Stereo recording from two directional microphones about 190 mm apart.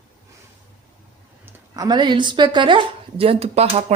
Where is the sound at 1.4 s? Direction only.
20° right (ahead or behind).